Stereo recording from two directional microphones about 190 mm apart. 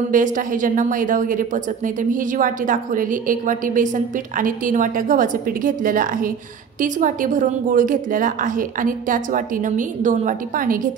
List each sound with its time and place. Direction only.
0.1 s a woman's voice: 45° right (ahead or behind)